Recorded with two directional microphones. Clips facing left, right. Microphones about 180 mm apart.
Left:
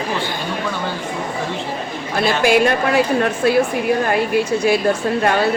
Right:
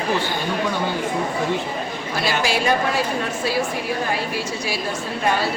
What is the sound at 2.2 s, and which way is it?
A woman's voice, 55° left (ahead or behind).